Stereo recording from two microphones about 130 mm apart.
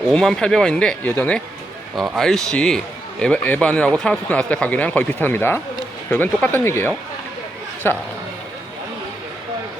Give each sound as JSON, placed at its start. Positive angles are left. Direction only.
{"t": 0.1, "sound": "a man's voice", "side_deg": 5}